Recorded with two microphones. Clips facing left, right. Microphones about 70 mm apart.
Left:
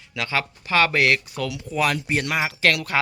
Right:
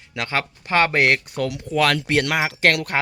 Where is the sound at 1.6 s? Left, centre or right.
Right.